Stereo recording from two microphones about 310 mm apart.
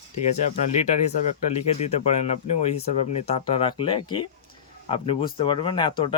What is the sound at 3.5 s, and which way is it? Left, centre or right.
Speech, centre.